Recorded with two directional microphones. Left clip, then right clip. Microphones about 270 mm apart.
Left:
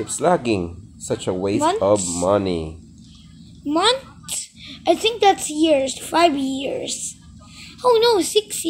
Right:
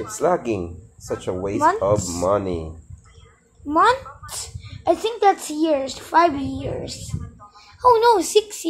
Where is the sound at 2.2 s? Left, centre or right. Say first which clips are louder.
Left 2 dB; left.